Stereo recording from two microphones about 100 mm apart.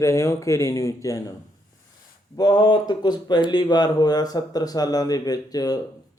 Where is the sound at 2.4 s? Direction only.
40° left (ahead or behind).